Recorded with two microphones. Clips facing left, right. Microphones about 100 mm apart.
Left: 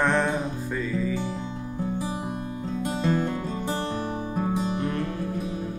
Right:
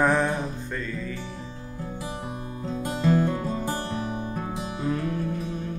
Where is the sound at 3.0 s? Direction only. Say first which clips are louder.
Right 4 dB; 5° right (ahead or behind).